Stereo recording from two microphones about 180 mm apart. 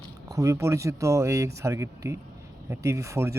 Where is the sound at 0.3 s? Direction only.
15° right (ahead or behind).